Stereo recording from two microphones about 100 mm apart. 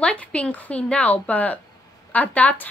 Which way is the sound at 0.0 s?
10° left (ahead or behind).